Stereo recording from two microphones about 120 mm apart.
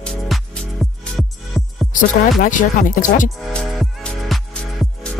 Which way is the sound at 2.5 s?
90° left.